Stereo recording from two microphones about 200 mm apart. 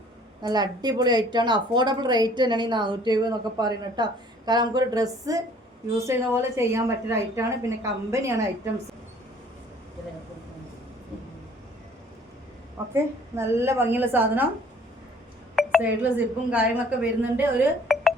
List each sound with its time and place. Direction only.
0.4 s a woman's voice: 20° right (ahead or behind)
12.9 s speech: 10° right (ahead or behind)
15.5 s speech: 5° right (ahead or behind)